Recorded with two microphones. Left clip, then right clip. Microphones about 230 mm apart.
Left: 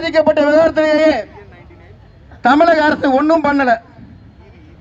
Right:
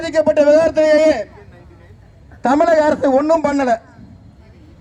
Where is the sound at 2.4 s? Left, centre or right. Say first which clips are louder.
Left 2 dB; right.